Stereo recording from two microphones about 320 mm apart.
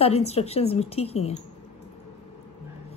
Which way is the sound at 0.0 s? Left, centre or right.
Centre.